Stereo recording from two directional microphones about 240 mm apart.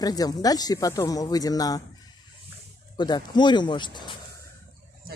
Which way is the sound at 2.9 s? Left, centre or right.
Centre.